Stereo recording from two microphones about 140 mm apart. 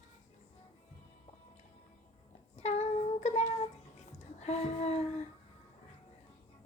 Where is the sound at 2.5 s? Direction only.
50° left (ahead or behind).